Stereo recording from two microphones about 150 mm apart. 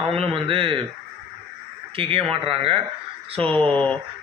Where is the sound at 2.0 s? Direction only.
40° right (ahead or behind).